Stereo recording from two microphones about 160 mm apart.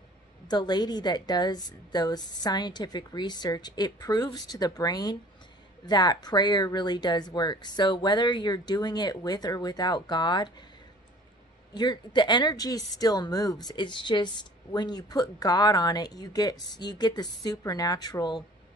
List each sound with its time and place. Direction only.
0.5 s speech: 25° left (ahead or behind)
11.7 s speech: 25° left (ahead or behind)